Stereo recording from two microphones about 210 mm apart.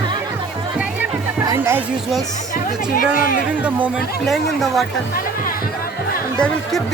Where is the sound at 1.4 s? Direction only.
15° right (ahead or behind).